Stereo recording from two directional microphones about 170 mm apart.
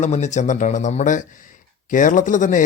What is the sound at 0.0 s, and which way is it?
Speech, 45° left (ahead or behind).